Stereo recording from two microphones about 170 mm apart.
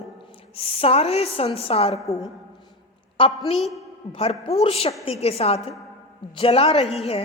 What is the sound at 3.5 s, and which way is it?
Speech, centre (ahead or behind).